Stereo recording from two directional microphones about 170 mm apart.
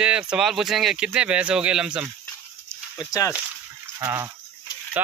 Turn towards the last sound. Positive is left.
turn(degrees=-10)  # may be behind; listen again after turning